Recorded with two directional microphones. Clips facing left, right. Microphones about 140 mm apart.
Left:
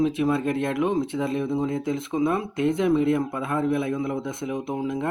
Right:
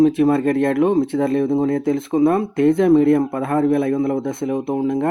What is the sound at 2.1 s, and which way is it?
Speech, 40° right (ahead or behind).